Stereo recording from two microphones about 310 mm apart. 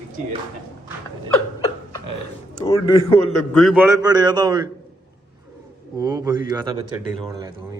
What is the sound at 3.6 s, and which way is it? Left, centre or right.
A man's voice, centre.